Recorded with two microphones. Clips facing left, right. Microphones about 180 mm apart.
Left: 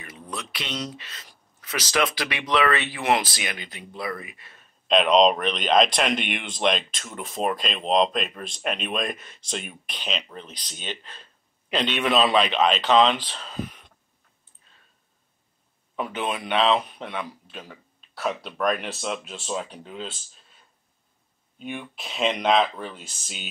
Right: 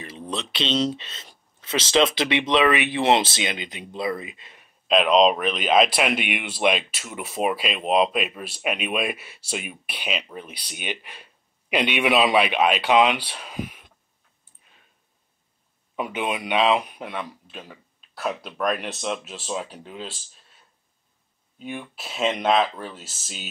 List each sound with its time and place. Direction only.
0.0 s speech: 30° right (ahead or behind)
4.8 s speech: centre (ahead or behind)
14.4 s a sound: 15° right (ahead or behind)
16.0 s a man's voice: 10° right (ahead or behind)
21.6 s a man's voice: 5° right (ahead or behind)